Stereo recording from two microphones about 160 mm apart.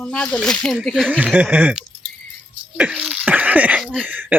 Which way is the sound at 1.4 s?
10° right (ahead or behind).